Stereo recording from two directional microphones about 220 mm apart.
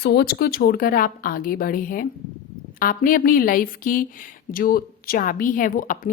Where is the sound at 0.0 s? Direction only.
45° left (ahead or behind).